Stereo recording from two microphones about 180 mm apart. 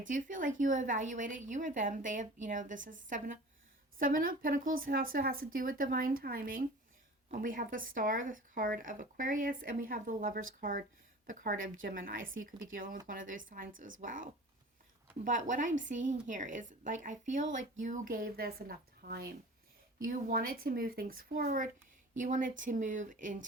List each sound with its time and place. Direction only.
0.0 s speech: 45° right (ahead or behind)
3.9 s speech: 50° right (ahead or behind)